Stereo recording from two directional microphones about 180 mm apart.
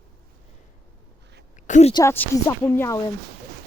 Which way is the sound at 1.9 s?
20° left (ahead or behind).